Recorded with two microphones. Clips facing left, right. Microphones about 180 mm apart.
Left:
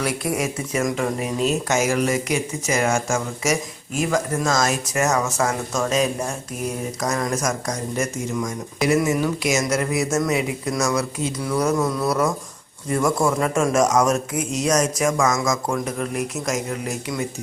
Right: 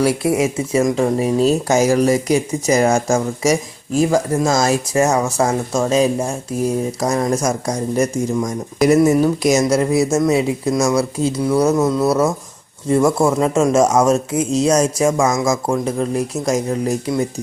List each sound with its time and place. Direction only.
0.0 s speech: 30° right (ahead or behind)